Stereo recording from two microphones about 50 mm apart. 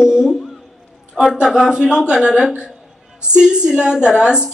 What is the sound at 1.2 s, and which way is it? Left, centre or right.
A woman's voice, centre.